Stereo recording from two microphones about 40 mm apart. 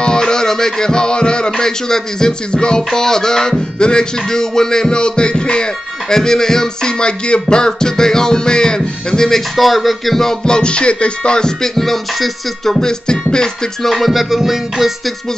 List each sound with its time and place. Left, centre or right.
0.0 s music: centre
9.6 s music: centre
10.4 s music: left
11.6 s music: centre
12.8 s music: centre
13.8 s music: centre